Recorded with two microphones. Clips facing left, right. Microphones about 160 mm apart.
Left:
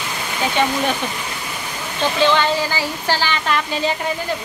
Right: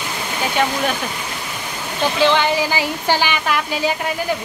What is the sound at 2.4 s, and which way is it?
Speech, 15° right (ahead or behind).